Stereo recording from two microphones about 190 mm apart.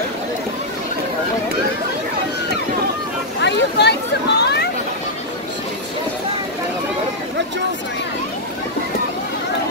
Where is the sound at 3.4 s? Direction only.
65° left (ahead or behind).